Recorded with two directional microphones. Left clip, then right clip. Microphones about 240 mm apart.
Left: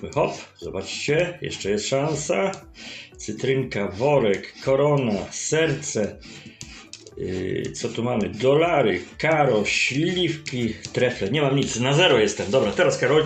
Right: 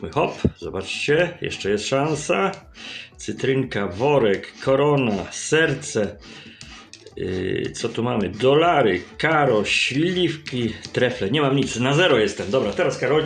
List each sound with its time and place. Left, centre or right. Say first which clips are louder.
0.2 s speech: right 2 dB; right
7.3 s speech: right 3 dB; right; by 13.2 s centre